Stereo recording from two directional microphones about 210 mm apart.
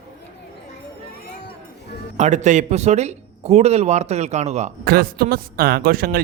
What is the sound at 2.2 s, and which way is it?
A man's voice, 35° right (ahead or behind).